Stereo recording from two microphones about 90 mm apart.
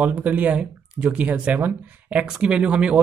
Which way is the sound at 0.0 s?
20° right (ahead or behind).